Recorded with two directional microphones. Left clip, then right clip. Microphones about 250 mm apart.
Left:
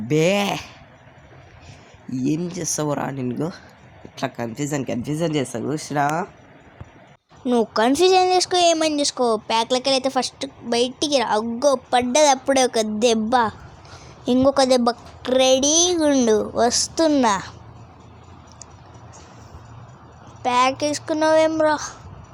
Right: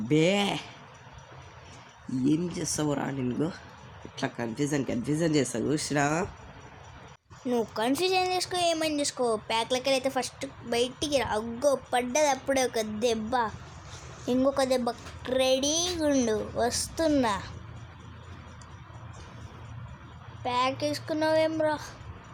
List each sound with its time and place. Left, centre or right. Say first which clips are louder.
0.1 s speech: left 6 dB; centre
2.2 s speech: left 4 dB; centre
7.4 s speech: left 9 dB; left
20.4 s speech: left 9 dB; centre